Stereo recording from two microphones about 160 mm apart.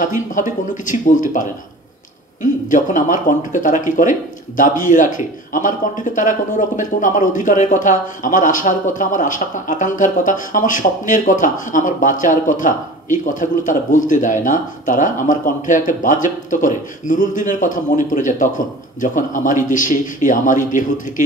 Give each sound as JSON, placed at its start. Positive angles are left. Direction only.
{"t": 0.0, "sound": "speech", "side_deg": 55}